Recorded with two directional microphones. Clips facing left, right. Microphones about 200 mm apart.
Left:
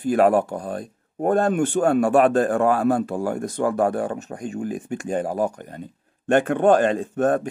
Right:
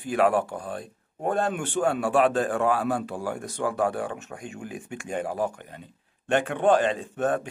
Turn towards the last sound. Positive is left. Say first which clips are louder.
# left 6 dB
turn(degrees=45)  # may be behind; listen again after turning